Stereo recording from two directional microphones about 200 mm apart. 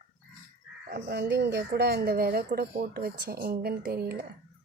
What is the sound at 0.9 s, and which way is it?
Speech, 55° right (ahead or behind).